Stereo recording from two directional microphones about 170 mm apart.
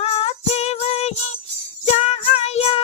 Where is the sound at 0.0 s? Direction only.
35° left (ahead or behind).